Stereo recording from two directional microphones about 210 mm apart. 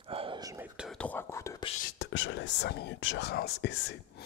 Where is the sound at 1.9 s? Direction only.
55° left (ahead or behind).